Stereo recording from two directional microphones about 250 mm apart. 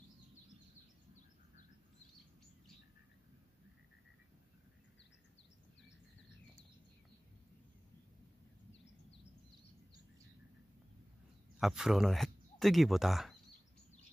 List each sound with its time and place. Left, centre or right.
11.5 s speech: centre